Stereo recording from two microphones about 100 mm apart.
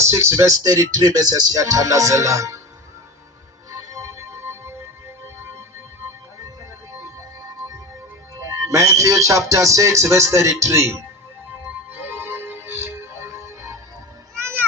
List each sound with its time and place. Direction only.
0.0 s speech: 25° right (ahead or behind)
3.7 s music: 35° right (ahead or behind)
8.4 s speech: 35° right (ahead or behind)
11.9 s music: 20° right (ahead or behind)